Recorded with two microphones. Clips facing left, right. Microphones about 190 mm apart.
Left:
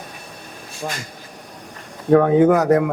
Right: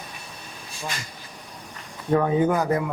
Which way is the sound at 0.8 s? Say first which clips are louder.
Left 5 dB; 50° left (ahead or behind).